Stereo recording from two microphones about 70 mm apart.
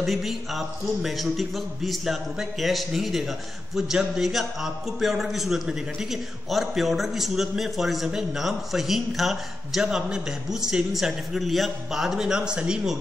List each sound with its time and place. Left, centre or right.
0.0 s speech: centre